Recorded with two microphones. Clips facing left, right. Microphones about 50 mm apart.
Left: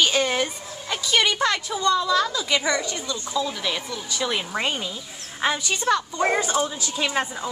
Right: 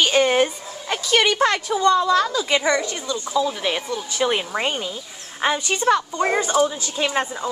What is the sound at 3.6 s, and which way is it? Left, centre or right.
Speech, right.